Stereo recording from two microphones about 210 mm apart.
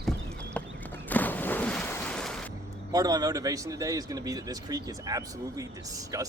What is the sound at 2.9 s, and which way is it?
Speech, 20° right (ahead or behind).